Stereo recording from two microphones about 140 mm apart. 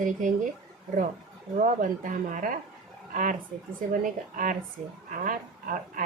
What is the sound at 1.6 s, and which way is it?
A woman's voice, 70° right (ahead or behind).